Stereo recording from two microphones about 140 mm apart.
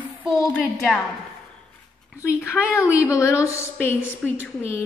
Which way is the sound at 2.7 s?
20° left (ahead or behind).